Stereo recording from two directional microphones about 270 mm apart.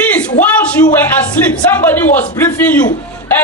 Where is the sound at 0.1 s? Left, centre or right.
Centre.